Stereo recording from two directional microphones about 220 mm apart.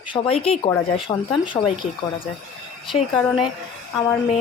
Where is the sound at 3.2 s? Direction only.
5° left (ahead or behind).